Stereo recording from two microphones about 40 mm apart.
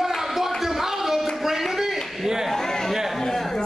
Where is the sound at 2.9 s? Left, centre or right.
Centre.